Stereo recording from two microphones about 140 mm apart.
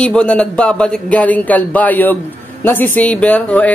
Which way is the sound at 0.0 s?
10° left (ahead or behind).